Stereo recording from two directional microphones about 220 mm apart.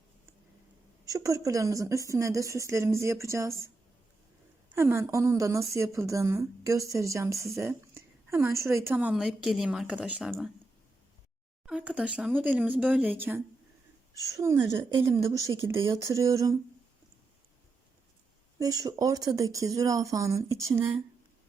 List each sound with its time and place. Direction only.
1.0 s a woman's voice: 15° right (ahead or behind)
4.7 s a woman's voice: 10° right (ahead or behind)
11.6 s a woman's voice: 5° right (ahead or behind)
18.6 s a woman's voice: 15° right (ahead or behind)